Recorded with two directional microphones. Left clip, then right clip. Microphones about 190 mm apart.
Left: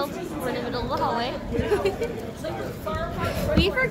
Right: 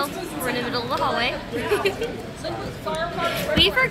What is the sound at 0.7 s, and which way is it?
Speech, 10° right (ahead or behind).